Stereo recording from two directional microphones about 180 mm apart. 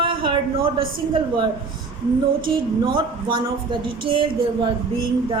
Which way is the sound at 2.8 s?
25° right (ahead or behind).